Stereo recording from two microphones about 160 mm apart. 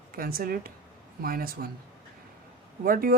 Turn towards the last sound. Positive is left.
turn(degrees=-65)  # may be behind; listen again after turning